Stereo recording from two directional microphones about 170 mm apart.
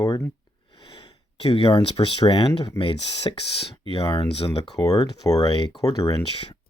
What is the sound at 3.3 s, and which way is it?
Speech, 25° left (ahead or behind).